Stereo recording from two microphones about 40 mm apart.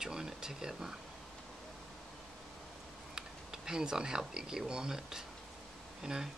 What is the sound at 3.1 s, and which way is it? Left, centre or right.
Speech, centre.